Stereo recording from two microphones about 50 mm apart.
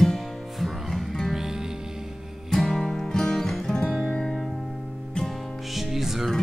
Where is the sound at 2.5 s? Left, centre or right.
Centre.